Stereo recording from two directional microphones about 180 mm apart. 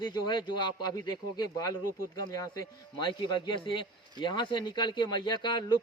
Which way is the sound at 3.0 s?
25° left (ahead or behind).